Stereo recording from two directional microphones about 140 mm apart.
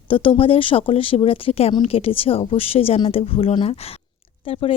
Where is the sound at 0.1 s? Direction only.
40° left (ahead or behind).